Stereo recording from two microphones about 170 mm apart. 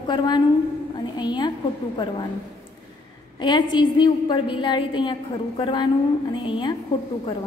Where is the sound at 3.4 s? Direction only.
25° left (ahead or behind).